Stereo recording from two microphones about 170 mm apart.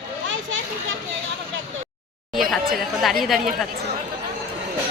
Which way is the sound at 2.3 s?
Centre (ahead or behind).